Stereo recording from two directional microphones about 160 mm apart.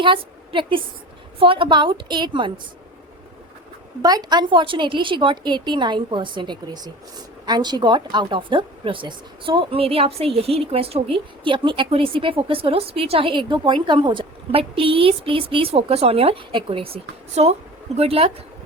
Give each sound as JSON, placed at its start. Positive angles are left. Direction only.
{"t": 0.0, "sound": "a woman's voice", "side_deg": -30}
{"t": 4.0, "sound": "a woman's voice", "side_deg": -25}